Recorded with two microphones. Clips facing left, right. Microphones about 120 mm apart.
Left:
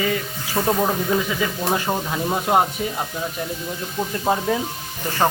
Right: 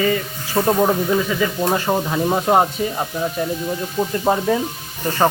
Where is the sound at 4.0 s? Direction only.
10° right (ahead or behind).